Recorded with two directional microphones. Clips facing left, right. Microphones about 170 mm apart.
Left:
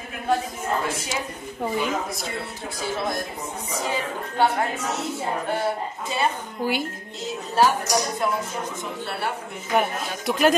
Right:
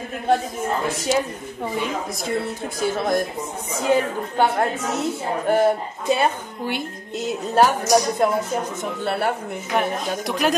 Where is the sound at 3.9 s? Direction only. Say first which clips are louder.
Right 12 dB; 55° right (ahead or behind).